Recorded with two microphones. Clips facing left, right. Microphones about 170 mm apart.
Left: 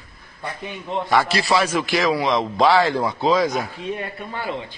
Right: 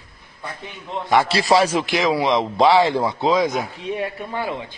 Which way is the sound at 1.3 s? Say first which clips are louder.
Right 3 dB; 30° right (ahead or behind).